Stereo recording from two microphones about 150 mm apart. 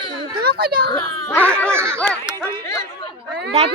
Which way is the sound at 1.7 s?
15° right (ahead or behind).